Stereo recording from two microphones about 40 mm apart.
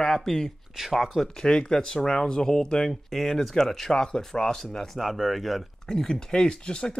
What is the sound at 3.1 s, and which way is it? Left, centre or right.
Speech, centre.